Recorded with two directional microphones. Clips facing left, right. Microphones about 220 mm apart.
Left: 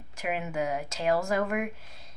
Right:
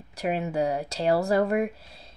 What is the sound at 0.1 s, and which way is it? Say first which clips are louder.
A woman's voice: right 5 dB; 35° right (ahead or behind).